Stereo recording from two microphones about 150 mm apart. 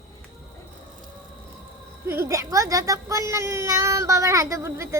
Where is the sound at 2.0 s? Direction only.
15° right (ahead or behind).